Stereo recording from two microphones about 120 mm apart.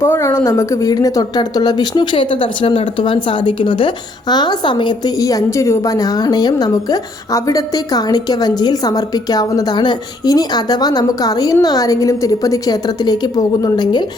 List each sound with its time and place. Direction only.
0.0 s speech: 20° left (ahead or behind)